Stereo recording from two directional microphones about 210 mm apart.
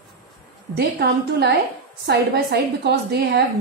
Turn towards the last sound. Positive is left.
turn(degrees=-50)  # may be behind; listen again after turning